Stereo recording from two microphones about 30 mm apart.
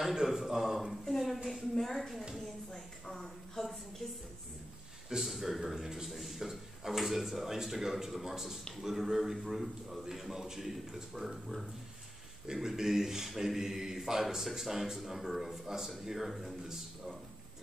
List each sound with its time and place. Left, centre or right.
0.1 s speech: centre
1.0 s a man's voice: centre; by 4.2 s left
5.2 s a man's voice: centre
10.3 s speech: centre
12.7 s speech: centre
15.6 s speech: centre
16.1 s a man's voice: centre